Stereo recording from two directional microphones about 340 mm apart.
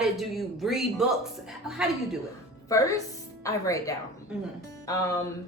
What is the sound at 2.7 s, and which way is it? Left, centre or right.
A woman's voice, centre.